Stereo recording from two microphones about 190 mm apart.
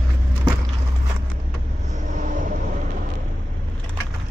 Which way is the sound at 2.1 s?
45° right (ahead or behind).